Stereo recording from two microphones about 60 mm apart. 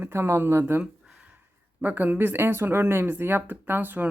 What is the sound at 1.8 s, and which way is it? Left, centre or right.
Speech, right.